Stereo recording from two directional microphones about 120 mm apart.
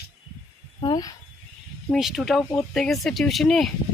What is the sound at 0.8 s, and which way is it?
Speech, 35° left (ahead or behind).